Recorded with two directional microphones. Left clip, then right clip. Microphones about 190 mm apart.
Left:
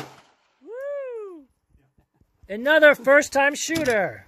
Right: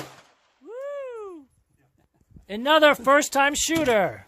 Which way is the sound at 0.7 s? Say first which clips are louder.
Left 3 dB; 10° right (ahead or behind).